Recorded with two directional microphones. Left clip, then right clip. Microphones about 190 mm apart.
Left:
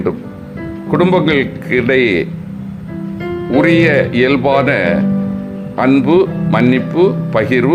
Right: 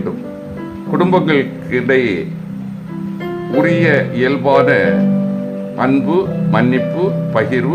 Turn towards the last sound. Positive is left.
turn(degrees=20)  # may be behind; listen again after turning